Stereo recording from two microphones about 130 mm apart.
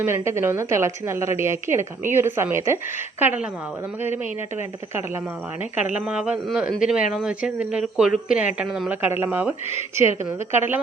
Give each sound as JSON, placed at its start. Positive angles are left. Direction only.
{"t": 0.0, "sound": "a woman's voice", "side_deg": -20}
{"t": 5.7, "sound": "speech", "side_deg": -10}